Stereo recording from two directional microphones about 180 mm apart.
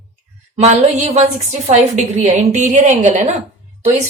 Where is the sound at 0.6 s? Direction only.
40° right (ahead or behind).